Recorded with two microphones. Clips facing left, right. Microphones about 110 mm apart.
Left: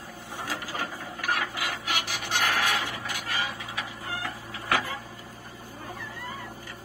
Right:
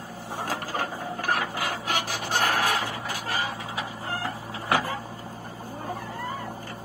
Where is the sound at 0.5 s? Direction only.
40° right (ahead or behind).